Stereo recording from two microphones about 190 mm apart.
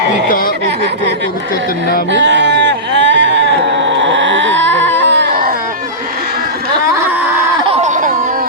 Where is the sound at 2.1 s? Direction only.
70° right (ahead or behind).